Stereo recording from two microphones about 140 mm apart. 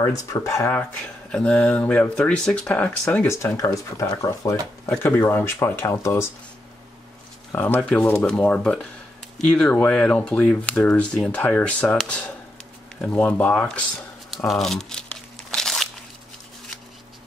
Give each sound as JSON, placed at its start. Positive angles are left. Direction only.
{"t": 0.0, "sound": "speech", "side_deg": 25}
{"t": 7.5, "sound": "speech", "side_deg": 10}
{"t": 14.5, "sound": "crumpling", "side_deg": 0}